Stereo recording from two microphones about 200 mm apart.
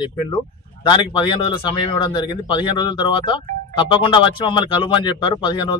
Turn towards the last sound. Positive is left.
turn(degrees=20)  # may be behind; listen again after turning